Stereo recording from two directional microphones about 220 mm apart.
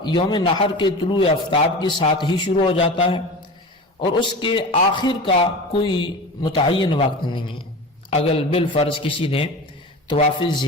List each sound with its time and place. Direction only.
0.0 s a man's voice: 20° left (ahead or behind)